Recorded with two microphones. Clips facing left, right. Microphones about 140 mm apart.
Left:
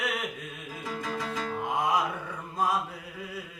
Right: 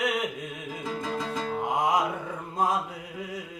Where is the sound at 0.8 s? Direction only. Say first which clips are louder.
Right 2 dB; 25° right (ahead or behind).